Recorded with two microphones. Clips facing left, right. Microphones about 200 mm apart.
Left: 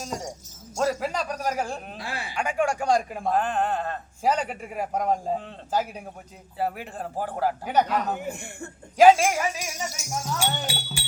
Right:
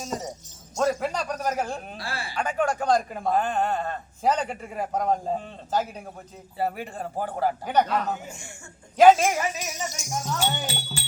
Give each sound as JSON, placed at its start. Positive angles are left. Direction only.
{"t": 0.8, "sound": "a man's voice", "side_deg": 5}
{"t": 3.2, "sound": "a man's voice", "side_deg": 0}
{"t": 8.2, "sound": "speech", "side_deg": 60}
{"t": 9.0, "sound": "a man's voice", "side_deg": 10}